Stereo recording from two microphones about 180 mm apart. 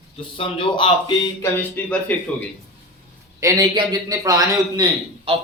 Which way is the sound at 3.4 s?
20° right (ahead or behind).